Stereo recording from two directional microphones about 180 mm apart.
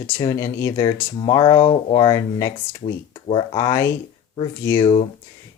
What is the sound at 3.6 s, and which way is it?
Speech, 15° left (ahead or behind).